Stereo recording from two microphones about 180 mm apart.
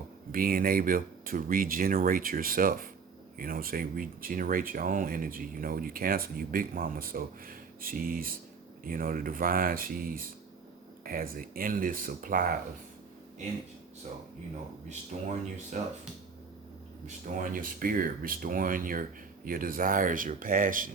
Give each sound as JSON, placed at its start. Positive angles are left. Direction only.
{"t": 0.3, "sound": "speech", "side_deg": -55}
{"t": 15.1, "sound": "speech", "side_deg": -45}
{"t": 17.3, "sound": "speech", "side_deg": -50}